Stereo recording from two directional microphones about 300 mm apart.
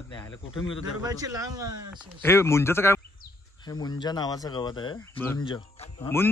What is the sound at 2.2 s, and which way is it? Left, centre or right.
Speech, centre.